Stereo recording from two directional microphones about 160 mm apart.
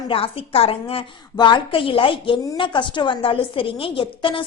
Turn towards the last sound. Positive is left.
turn(degrees=35)  # may be behind; listen again after turning